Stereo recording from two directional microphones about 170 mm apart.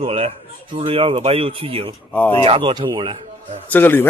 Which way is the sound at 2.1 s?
10° left (ahead or behind).